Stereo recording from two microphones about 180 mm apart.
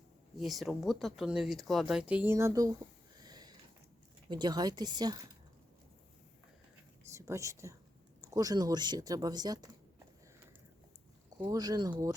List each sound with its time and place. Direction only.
0.3 s speech: centre (ahead or behind); by 2.6 s 15° right (ahead or behind)
3.2 s sniff: 20° right (ahead or behind)
4.3 s speech: 25° right (ahead or behind)
7.1 s speech: 15° right (ahead or behind)
11.4 s speech: 20° right (ahead or behind)